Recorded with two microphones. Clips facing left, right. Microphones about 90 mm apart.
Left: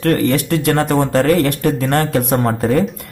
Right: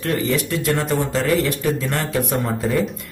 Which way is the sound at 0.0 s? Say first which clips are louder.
Left 6 dB; 60° left (ahead or behind).